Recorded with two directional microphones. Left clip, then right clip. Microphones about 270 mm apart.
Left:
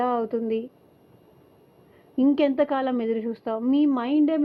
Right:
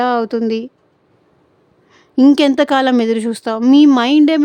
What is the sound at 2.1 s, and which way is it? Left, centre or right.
Speech, right.